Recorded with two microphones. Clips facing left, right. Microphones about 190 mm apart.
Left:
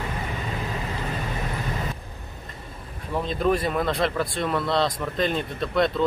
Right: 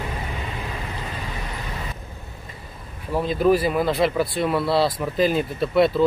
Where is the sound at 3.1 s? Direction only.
5° right (ahead or behind).